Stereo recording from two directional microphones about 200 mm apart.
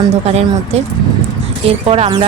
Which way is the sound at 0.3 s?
30° right (ahead or behind).